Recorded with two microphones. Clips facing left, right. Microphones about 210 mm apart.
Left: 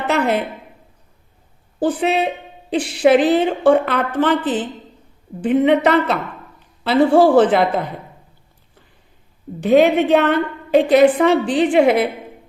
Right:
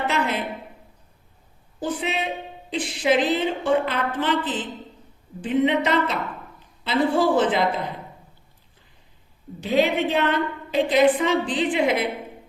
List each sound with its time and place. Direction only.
0.1 s a woman's voice: 60° left (ahead or behind)
1.8 s a woman's voice: 65° left (ahead or behind)
9.6 s a woman's voice: 55° left (ahead or behind)